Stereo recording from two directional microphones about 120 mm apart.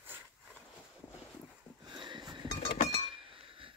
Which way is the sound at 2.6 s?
60° left (ahead or behind).